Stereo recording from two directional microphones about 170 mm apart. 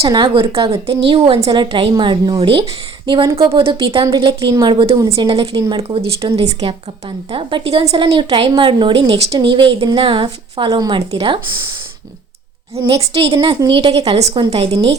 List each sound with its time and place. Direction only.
0.0 s a woman's voice: 30° right (ahead or behind)
12.7 s a woman's voice: 35° right (ahead or behind)